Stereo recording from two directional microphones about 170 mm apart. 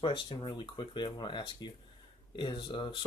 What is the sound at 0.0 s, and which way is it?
Speech, 30° left (ahead or behind).